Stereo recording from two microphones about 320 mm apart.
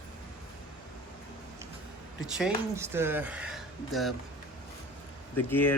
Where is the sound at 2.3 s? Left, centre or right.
Centre.